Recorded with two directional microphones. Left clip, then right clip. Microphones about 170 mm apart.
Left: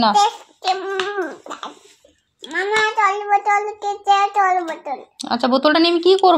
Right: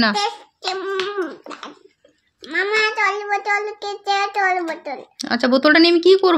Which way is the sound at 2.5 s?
35° right (ahead or behind).